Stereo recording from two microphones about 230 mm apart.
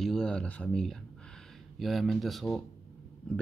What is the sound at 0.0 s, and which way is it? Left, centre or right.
Speech, centre.